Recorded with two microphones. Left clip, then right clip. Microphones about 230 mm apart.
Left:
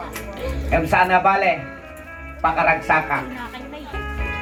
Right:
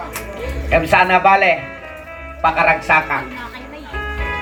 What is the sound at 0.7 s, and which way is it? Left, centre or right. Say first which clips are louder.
Speech: right 4 dB; right.